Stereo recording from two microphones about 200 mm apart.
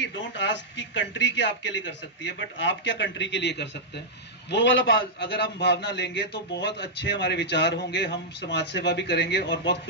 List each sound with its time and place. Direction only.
0.0 s a man's voice: 60° left (ahead or behind)